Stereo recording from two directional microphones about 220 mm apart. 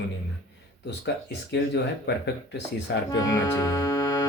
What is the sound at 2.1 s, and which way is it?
Speech, 50° left (ahead or behind).